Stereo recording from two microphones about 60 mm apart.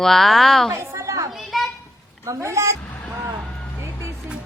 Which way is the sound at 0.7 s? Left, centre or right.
Right.